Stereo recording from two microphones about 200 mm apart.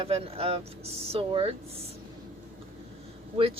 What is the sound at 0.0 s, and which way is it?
Speech, 30° right (ahead or behind).